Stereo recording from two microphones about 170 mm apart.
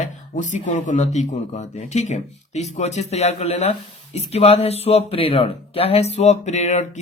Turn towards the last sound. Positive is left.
turn(degrees=45)  # may be behind; listen again after turning